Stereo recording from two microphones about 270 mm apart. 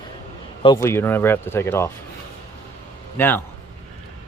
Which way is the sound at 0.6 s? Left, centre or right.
Centre.